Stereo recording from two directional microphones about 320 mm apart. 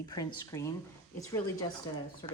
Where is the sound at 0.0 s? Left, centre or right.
Centre.